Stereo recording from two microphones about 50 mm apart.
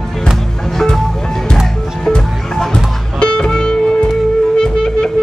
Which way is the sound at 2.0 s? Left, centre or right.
Centre.